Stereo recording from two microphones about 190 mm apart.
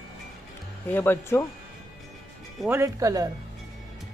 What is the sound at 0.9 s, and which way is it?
Speech, 10° left (ahead or behind).